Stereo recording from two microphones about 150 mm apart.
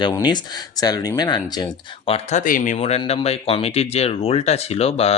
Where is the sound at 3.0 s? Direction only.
40° left (ahead or behind).